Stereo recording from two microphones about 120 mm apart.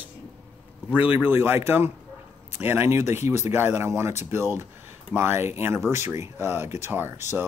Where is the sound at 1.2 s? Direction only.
20° right (ahead or behind).